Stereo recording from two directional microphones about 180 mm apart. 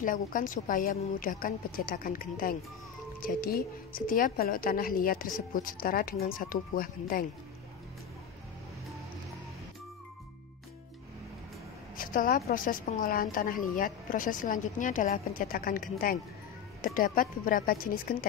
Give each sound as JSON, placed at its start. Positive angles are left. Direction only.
{"t": 0.0, "sound": "a woman's voice", "side_deg": 50}
{"t": 12.0, "sound": "a woman's voice", "side_deg": 50}